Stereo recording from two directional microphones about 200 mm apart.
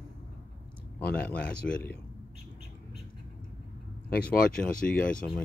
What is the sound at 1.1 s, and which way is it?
Speech, 5° left (ahead or behind).